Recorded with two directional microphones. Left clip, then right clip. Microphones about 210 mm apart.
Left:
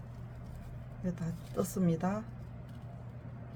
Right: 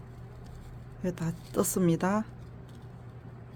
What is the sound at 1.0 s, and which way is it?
A woman's voice, 50° right (ahead or behind).